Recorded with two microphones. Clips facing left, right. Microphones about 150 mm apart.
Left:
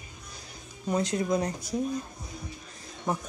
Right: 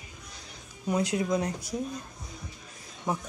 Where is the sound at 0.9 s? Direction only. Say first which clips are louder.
Even; 5° right (ahead or behind).